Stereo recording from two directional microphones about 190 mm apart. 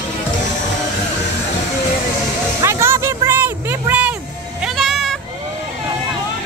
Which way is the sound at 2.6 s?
15° right (ahead or behind).